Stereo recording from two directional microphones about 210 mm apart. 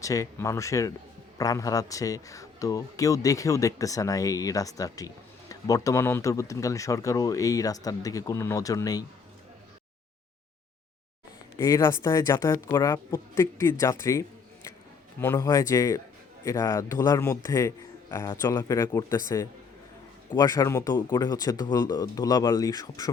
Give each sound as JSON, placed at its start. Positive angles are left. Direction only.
{"t": 0.0, "sound": "speech", "side_deg": 15}
{"t": 11.5, "sound": "speech", "side_deg": 15}